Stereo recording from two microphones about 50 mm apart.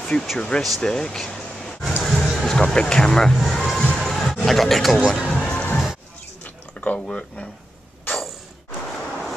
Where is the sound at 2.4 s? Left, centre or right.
Centre.